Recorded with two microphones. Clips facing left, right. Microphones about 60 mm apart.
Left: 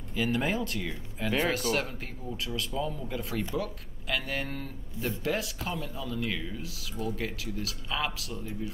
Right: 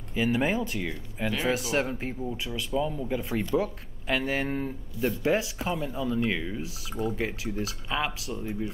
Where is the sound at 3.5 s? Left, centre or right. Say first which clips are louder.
Right 6 dB; right.